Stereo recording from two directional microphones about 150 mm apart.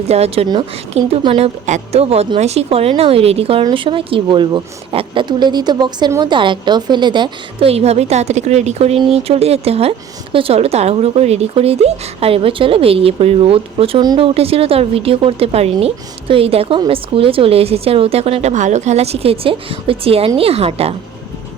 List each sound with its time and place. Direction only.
0.1 s speech: 45° right (ahead or behind)
1.6 s speech: 50° right (ahead or behind)